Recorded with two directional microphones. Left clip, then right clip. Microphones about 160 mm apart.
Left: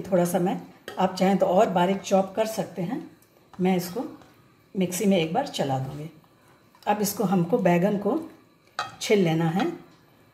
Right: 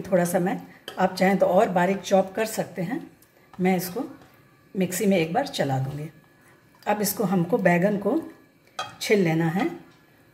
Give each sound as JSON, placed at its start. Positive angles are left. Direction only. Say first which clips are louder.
{"t": 0.0, "sound": "speech", "louder": "right 1 dB", "side_deg": -10}
{"t": 6.8, "sound": "speech", "louder": "even", "side_deg": -10}